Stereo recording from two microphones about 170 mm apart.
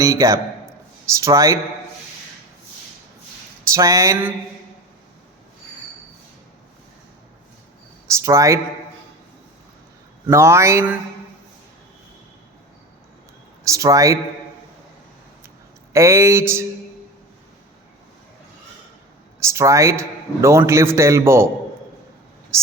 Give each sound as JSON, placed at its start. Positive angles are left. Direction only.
{"t": 0.0, "sound": "a man's voice", "side_deg": -20}
{"t": 3.7, "sound": "a man's voice", "side_deg": -20}
{"t": 8.1, "sound": "speech", "side_deg": -20}
{"t": 10.2, "sound": "a man's voice", "side_deg": -15}
{"t": 13.7, "sound": "speech", "side_deg": -20}
{"t": 15.9, "sound": "a man's voice", "side_deg": -15}
{"t": 19.4, "sound": "a man's voice", "side_deg": -15}
{"t": 22.5, "sound": "speech", "side_deg": -15}